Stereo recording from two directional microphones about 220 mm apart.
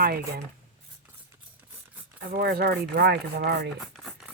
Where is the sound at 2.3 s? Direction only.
45° right (ahead or behind).